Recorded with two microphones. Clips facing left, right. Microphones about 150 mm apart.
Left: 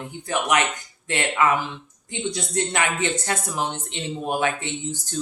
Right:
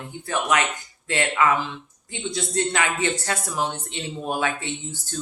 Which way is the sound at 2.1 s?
20° left (ahead or behind).